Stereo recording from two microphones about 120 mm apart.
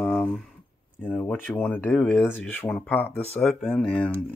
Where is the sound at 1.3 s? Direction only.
10° left (ahead or behind).